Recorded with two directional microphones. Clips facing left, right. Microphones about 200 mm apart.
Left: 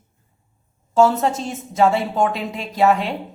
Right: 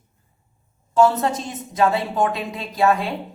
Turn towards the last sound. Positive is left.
turn(degrees=20)  # may be behind; listen again after turning